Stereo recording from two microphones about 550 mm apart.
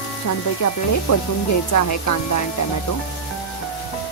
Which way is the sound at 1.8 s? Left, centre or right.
Left.